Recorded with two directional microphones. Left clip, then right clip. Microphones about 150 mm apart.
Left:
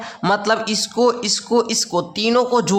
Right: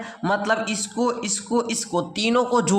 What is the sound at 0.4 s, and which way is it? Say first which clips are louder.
A man's voice: left 4 dB; 20° left (ahead or behind).